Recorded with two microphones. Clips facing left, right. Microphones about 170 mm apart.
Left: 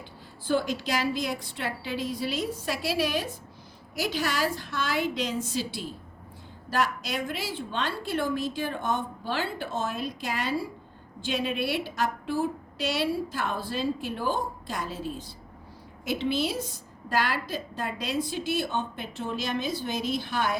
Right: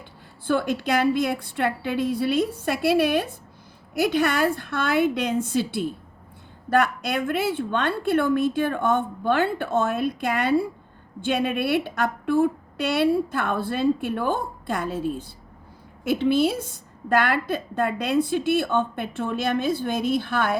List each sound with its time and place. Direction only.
0.4 s a woman's voice: 60° right (ahead or behind)